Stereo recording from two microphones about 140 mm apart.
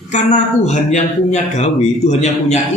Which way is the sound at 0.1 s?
55° left (ahead or behind).